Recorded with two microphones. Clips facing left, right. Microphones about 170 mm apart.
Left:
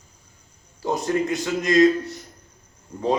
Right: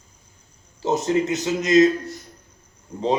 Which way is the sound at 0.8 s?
20° right (ahead or behind).